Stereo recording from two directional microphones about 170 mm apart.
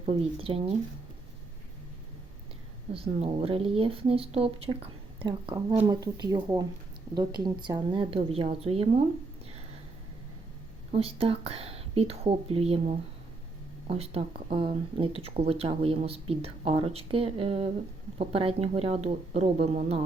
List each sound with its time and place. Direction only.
0.0 s speech: 35° right (ahead or behind)
2.9 s speech: 35° right (ahead or behind)
10.9 s speech: 35° right (ahead or behind)